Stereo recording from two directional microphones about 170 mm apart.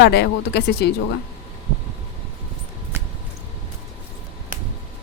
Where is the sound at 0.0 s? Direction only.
75° left (ahead or behind).